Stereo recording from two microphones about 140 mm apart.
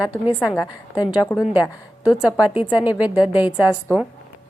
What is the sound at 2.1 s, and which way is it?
A woman's voice, 5° right (ahead or behind).